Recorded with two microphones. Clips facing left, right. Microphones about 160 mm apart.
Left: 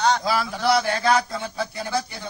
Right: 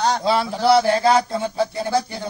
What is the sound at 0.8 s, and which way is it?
Mantra, 25° right (ahead or behind).